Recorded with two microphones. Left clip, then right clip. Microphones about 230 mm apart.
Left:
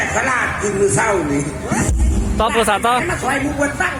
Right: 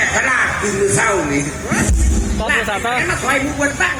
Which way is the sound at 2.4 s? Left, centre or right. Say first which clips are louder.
Left 3 dB; left.